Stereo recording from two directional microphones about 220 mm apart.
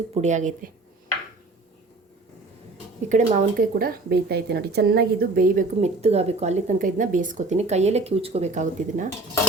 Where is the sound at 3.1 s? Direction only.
40° right (ahead or behind).